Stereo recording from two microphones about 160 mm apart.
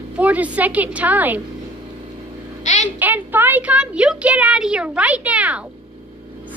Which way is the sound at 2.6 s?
45° left (ahead or behind).